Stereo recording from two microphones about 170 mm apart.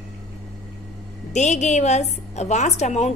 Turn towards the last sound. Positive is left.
turn(degrees=40)  # may be behind; listen again after turning